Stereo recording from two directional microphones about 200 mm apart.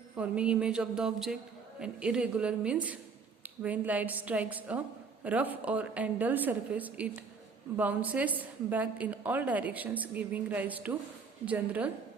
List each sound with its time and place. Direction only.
0.2 s a woman's voice: 5° right (ahead or behind)